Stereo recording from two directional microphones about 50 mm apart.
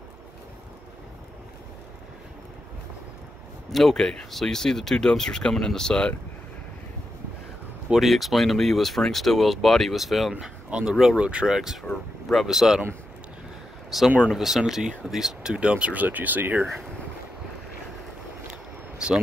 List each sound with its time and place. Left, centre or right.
3.7 s speech: centre
7.9 s speech: centre
11.1 s speech: right
11.5 s speech: centre
13.8 s speech: centre; by 16.6 s right
18.5 s a sound: centre